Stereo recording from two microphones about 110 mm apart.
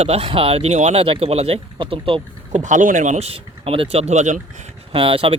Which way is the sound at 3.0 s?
80° right.